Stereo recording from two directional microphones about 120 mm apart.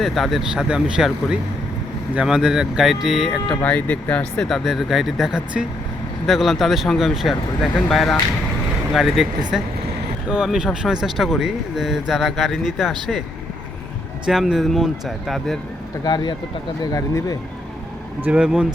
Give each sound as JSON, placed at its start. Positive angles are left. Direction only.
{"t": 0.0, "sound": "speech", "side_deg": 0}
{"t": 3.5, "sound": "speech", "side_deg": 10}
{"t": 14.3, "sound": "speech", "side_deg": -5}
{"t": 16.0, "sound": "speech", "side_deg": 35}
{"t": 18.2, "sound": "speech", "side_deg": -10}